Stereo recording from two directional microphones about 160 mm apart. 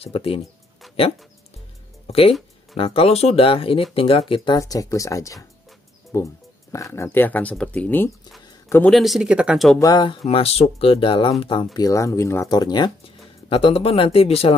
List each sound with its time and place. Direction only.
0.0 s speech: 35° left (ahead or behind)
0.8 s dog: centre (ahead or behind)
2.0 s speech: 35° left (ahead or behind)
4.6 s speech: 20° left (ahead or behind)
8.5 s a sound: 15° left (ahead or behind)
8.9 s speech: centre (ahead or behind)
9.8 s speech: 25° left (ahead or behind)
10.2 s speech: 40° left (ahead or behind)